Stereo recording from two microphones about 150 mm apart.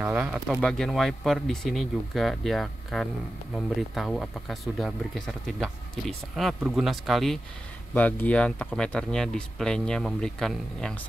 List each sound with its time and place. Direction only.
0.0 s speech: 10° right (ahead or behind)
0.5 s speech: 5° left (ahead or behind)
7.9 s speech: 10° left (ahead or behind)